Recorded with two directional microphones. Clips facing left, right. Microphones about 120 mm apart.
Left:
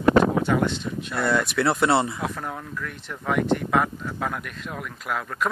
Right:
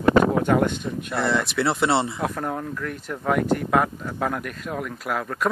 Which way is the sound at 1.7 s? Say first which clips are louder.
Left 1 dB; centre (ahead or behind).